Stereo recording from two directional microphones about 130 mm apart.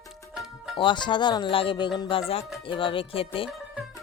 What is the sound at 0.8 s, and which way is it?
Speech, 40° left (ahead or behind).